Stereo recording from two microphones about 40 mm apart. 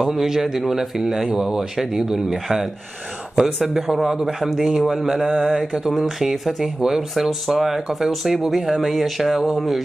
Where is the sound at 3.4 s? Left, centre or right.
Centre.